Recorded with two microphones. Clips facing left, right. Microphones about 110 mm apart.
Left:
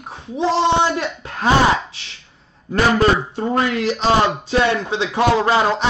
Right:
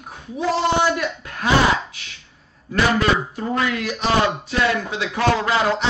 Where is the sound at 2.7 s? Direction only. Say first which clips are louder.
Left 3 dB; 30° left (ahead or behind).